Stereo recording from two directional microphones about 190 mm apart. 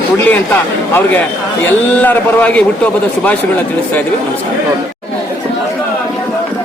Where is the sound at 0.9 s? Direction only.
10° left (ahead or behind).